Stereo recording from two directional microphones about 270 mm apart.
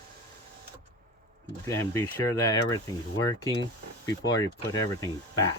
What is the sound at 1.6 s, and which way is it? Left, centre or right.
Speech, centre.